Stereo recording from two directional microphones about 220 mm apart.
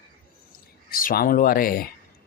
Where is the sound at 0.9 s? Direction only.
40° left (ahead or behind).